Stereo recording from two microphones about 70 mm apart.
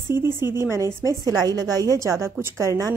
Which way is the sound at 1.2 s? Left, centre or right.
Right.